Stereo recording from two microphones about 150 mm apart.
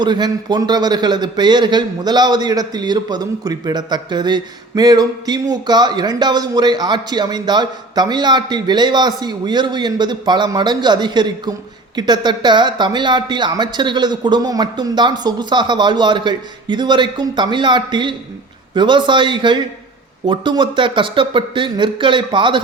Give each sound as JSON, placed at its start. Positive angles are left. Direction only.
{"t": 0.0, "sound": "a man's voice", "side_deg": -30}